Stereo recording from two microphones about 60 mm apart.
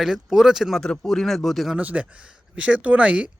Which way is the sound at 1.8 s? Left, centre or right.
Right.